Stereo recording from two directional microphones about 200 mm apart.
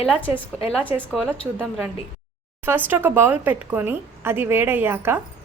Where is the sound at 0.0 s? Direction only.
5° left (ahead or behind).